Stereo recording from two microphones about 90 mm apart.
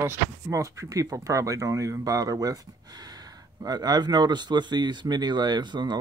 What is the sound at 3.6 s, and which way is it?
Speech, 45° right (ahead or behind).